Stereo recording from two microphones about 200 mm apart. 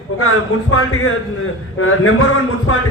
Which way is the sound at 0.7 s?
90° left.